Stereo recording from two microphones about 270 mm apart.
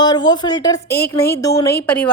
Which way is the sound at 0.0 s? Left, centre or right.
Centre.